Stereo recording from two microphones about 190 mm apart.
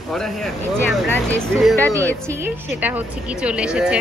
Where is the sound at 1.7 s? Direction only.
15° right (ahead or behind).